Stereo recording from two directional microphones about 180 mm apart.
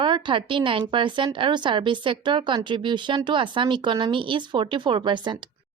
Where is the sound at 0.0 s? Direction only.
25° right (ahead or behind).